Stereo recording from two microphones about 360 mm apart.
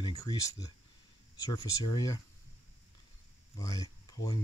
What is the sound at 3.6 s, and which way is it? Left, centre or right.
Speech, centre.